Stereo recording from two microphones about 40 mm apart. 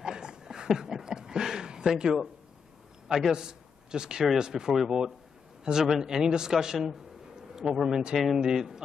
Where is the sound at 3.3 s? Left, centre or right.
Centre.